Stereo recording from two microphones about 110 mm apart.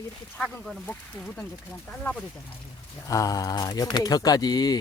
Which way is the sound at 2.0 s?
15° left (ahead or behind).